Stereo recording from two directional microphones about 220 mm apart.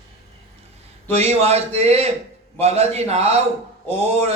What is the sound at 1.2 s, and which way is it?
Speech, 30° right (ahead or behind).